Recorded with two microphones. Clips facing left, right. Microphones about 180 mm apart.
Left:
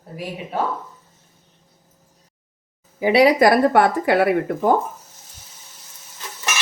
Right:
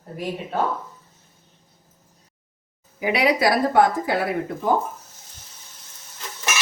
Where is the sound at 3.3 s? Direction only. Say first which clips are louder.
Left 4 dB; 60° left (ahead or behind).